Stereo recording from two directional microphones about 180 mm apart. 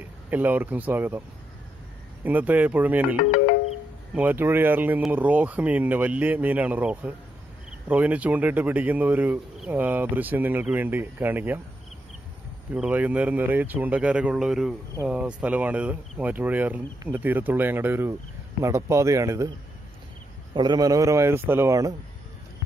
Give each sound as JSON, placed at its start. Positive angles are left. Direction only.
{"t": 0.3, "sound": "speech", "side_deg": -10}
{"t": 2.2, "sound": "speech", "side_deg": -10}
{"t": 12.7, "sound": "speech", "side_deg": -5}
{"t": 20.5, "sound": "a man's voice", "side_deg": -25}